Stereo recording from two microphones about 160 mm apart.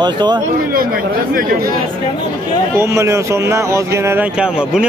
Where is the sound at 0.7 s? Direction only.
65° right (ahead or behind).